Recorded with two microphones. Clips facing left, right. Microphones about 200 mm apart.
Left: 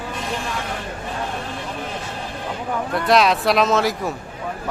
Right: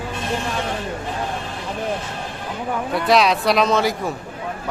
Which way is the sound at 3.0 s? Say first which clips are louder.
Even; centre (ahead or behind).